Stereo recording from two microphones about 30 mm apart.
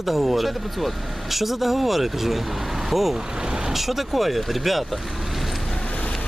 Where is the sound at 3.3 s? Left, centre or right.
Right.